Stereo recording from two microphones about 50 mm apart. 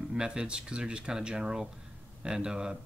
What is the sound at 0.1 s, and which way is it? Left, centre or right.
Speech, centre.